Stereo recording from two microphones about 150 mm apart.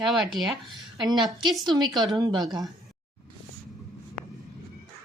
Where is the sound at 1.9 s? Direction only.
Centre (ahead or behind).